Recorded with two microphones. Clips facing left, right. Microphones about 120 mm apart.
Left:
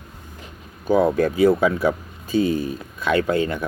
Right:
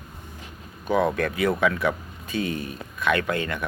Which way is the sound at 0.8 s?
35° left (ahead or behind).